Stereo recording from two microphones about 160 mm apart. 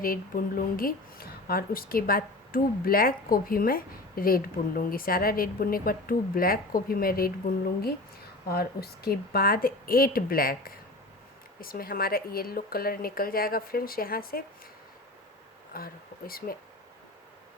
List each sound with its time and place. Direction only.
0.0 s speech: 60° left (ahead or behind)
15.7 s speech: 65° left (ahead or behind)